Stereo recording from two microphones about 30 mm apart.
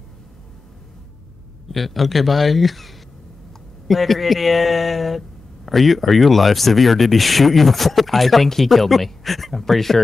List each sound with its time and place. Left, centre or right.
1.7 s speech: centre